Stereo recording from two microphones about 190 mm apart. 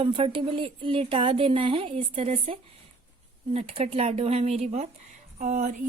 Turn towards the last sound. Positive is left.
turn(degrees=-45)  # may be behind; listen again after turning